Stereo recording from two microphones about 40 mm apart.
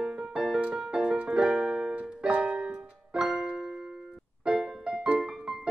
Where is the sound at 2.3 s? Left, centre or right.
Right.